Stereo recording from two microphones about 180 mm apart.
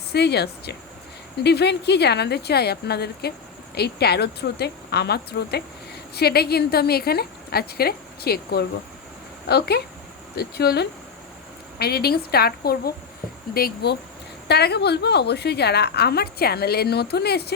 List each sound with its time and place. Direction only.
0.1 s a woman's voice: 65° left (ahead or behind)